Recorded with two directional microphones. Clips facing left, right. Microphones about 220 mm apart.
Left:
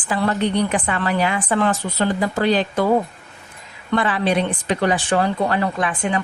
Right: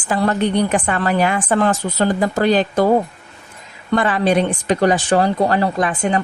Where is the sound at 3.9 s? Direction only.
45° right (ahead or behind).